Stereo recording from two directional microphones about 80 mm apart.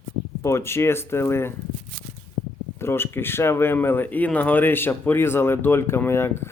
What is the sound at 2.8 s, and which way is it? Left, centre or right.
Speech, left.